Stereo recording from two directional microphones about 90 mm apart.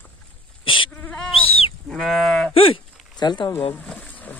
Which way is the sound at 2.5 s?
90° left.